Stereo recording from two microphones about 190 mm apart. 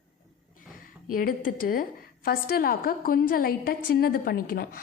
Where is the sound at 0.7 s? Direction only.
45° left (ahead or behind).